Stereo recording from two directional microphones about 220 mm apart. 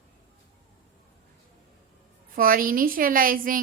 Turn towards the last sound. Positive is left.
turn(degrees=-40)  # may be behind; listen again after turning